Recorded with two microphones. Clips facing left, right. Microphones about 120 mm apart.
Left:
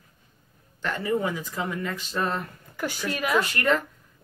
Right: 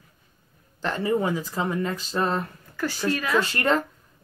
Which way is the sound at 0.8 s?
30° right (ahead or behind).